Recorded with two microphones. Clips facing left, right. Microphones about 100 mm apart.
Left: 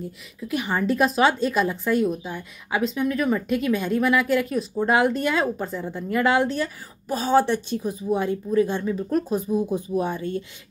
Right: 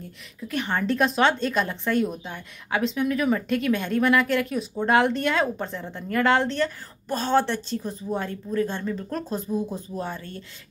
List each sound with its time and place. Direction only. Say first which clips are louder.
0.4 s speech: left 2 dB; 5° left (ahead or behind)